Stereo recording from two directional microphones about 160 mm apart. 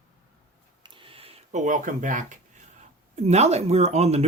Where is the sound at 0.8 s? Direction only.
30° right (ahead or behind); by 2.4 s 55° right (ahead or behind).